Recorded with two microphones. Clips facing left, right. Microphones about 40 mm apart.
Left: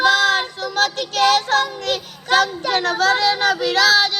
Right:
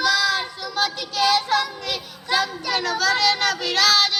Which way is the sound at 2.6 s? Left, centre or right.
Left.